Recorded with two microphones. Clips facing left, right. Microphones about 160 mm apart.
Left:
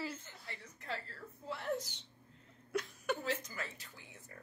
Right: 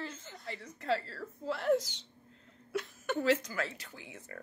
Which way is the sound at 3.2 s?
90° right.